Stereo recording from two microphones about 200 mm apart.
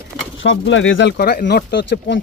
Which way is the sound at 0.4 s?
70° left (ahead or behind).